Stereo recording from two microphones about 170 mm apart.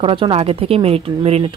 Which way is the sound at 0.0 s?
30° right (ahead or behind).